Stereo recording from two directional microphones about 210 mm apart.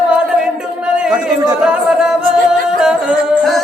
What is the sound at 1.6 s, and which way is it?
Music, 5° right (ahead or behind).